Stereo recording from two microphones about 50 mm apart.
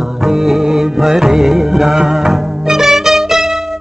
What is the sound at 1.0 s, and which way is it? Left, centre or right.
Music, centre.